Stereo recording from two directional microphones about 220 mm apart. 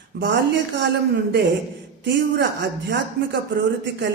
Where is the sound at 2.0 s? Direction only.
50° right (ahead or behind).